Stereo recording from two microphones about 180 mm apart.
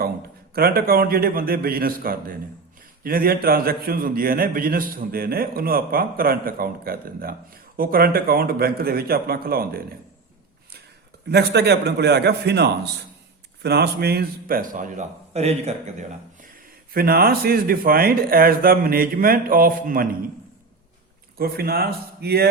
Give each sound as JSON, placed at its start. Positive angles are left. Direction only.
{"t": 0.5, "sound": "a man's voice", "side_deg": -55}
{"t": 11.3, "sound": "a man's voice", "side_deg": -65}
{"t": 16.9, "sound": "a man's voice", "side_deg": -55}
{"t": 21.3, "sound": "a man's voice", "side_deg": -55}